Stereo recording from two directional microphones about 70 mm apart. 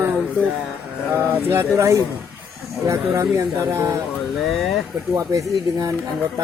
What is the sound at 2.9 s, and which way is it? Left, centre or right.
Speech, right.